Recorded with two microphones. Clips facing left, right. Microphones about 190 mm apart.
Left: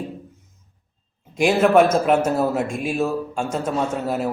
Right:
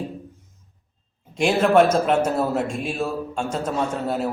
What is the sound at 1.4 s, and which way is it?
A man's voice, 5° left (ahead or behind).